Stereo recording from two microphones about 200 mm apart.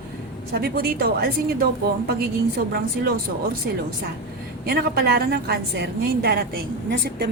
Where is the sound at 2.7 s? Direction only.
50° right (ahead or behind).